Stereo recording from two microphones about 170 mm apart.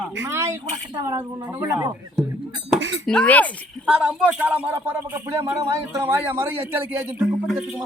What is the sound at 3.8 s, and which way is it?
A man's voice, 5° right (ahead or behind).